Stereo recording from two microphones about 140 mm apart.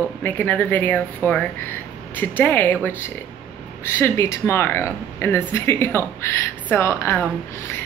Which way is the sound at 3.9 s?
20° left (ahead or behind).